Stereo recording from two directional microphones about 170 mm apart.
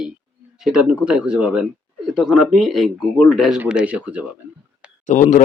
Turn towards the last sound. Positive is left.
turn(degrees=45)  # may be behind; listen again after turning